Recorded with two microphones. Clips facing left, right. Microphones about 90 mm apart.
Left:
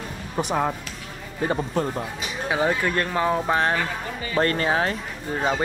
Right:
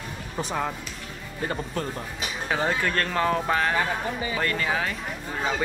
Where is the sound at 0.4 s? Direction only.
20° left (ahead or behind).